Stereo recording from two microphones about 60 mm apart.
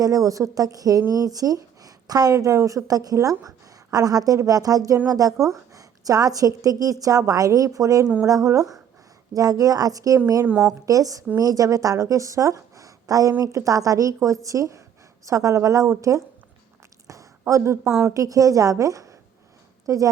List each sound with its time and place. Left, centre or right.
0.0 s speech: right
2.6 s a woman's voice: right
3.9 s a woman's voice: right
17.1 s a sound: right
17.4 s a woman's voice: right
18.1 s a woman's voice: right